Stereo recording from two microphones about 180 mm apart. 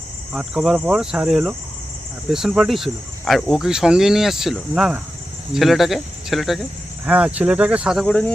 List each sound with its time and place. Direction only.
0.3 s cricket: centre (ahead or behind)